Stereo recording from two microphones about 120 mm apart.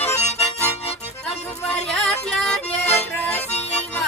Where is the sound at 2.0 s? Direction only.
5° left (ahead or behind).